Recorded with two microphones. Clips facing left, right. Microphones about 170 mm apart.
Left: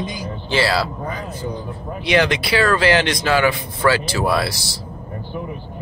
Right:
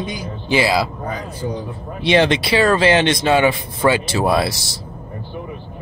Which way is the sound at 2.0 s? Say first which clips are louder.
Right 3 dB; 25° right (ahead or behind).